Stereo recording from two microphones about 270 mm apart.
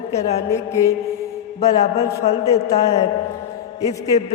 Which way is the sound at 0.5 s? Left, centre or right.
Centre.